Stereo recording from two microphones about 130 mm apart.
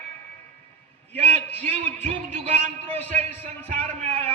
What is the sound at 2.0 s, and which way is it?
Speech, 50° right (ahead or behind).